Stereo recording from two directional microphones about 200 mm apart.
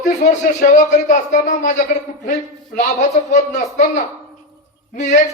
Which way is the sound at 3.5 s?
45° left (ahead or behind).